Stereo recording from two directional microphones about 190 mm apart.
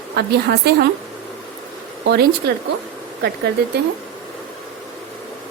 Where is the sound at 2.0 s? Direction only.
60° right (ahead or behind).